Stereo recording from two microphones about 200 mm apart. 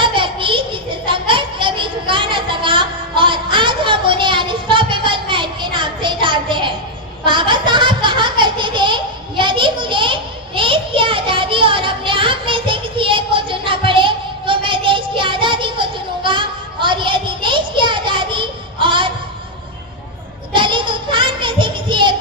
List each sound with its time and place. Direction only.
0.0 s child singing: 25° right (ahead or behind)
7.3 s a sound: 25° right (ahead or behind)
20.5 s child singing: 25° right (ahead or behind)